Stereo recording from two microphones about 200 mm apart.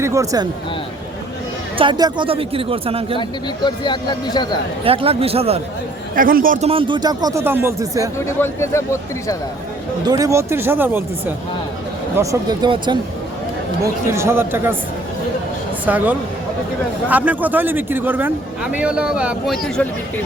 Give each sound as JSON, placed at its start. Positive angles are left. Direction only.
{"t": 0.0, "sound": "a man's voice", "side_deg": -15}
{"t": 1.8, "sound": "speech", "side_deg": -20}
{"t": 3.2, "sound": "speech", "side_deg": 20}
{"t": 4.8, "sound": "speech", "side_deg": -30}
{"t": 6.1, "sound": "a man's voice", "side_deg": -45}
{"t": 6.7, "sound": "speech", "side_deg": -25}
{"t": 8.2, "sound": "speech", "side_deg": 15}
{"t": 10.1, "sound": "a man's voice", "side_deg": -15}
{"t": 12.1, "sound": "a man's voice", "side_deg": -15}
{"t": 15.9, "sound": "a man's voice", "side_deg": -10}